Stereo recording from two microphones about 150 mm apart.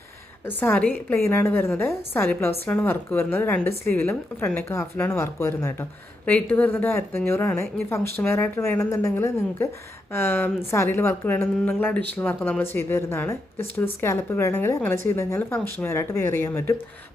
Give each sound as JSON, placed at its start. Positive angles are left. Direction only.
{"t": 0.4, "sound": "a woman's voice", "side_deg": 15}